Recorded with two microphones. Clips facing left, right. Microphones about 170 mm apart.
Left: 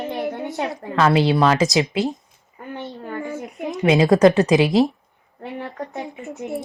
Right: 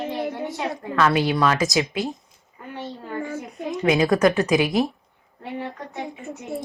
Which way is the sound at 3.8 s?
25° left (ahead or behind).